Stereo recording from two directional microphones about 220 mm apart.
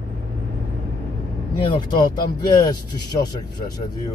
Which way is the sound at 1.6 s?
20° left (ahead or behind).